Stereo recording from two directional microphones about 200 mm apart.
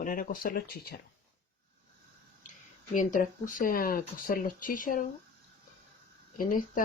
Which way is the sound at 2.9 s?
40° left (ahead or behind).